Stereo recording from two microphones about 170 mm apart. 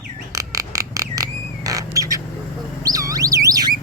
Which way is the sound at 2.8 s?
20° right (ahead or behind).